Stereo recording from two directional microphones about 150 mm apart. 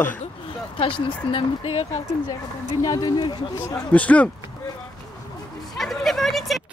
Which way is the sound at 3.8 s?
10° left (ahead or behind).